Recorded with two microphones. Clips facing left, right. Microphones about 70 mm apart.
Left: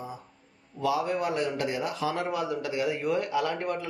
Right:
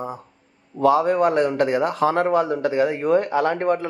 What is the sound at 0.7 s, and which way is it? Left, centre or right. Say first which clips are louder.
A man's voice: right 10 dB; right.